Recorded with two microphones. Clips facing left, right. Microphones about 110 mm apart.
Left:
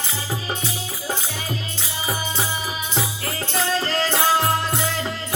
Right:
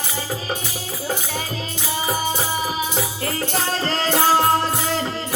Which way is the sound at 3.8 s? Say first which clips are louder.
Right 2 dB; 40° right (ahead or behind).